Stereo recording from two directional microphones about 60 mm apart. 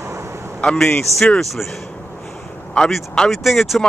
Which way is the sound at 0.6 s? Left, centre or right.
Centre.